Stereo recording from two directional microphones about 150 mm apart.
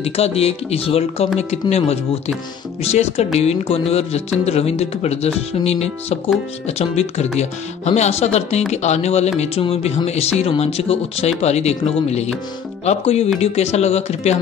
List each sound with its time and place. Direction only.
0.0 s speech: 40° left (ahead or behind)